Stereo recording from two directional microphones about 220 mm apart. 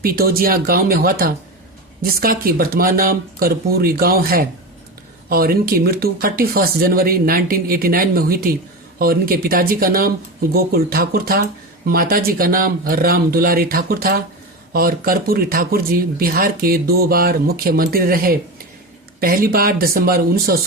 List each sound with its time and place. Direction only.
0.0 s speech: 40° right (ahead or behind)